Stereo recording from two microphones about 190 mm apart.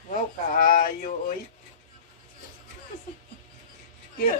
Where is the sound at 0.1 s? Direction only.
45° left (ahead or behind).